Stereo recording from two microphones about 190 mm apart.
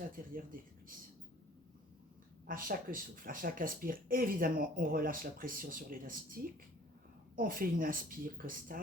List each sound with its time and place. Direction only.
0.1 s speech: 45° right (ahead or behind)
2.5 s speech: 50° right (ahead or behind)